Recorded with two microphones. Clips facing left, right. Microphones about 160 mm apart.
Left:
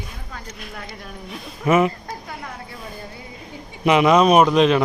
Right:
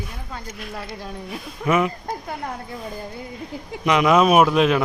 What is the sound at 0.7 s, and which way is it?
Speech, 30° right (ahead or behind).